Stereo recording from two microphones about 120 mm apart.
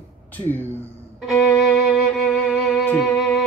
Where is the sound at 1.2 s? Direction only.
Centre (ahead or behind).